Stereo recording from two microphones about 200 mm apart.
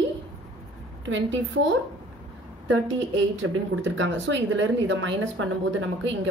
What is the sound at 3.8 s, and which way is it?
A woman's voice, 65° right (ahead or behind).